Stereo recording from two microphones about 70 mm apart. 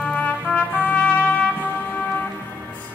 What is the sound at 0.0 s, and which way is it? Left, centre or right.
Trumpet, centre.